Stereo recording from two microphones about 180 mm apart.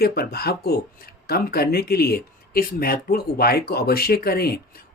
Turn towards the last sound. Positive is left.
turn(degrees=60)  # may be behind; listen again after turning